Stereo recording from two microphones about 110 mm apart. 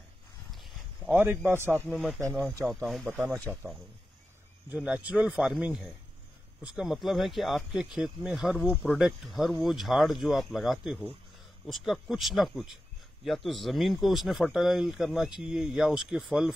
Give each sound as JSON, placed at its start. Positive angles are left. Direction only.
{"t": 0.5, "sound": "a sound", "side_deg": 0}
{"t": 1.1, "sound": "a man's voice", "side_deg": -20}
{"t": 2.6, "sound": "speech", "side_deg": 5}
{"t": 3.5, "sound": "speech", "side_deg": -15}
{"t": 4.6, "sound": "speech", "side_deg": -10}